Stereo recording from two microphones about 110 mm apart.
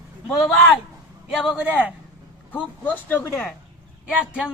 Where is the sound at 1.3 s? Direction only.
5° right (ahead or behind).